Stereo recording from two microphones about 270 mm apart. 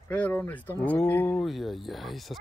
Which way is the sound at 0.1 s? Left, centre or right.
Centre.